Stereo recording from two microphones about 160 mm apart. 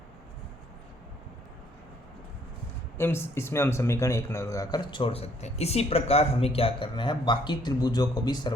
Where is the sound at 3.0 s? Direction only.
15° left (ahead or behind).